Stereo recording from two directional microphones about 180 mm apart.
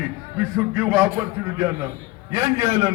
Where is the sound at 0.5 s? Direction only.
5° right (ahead or behind).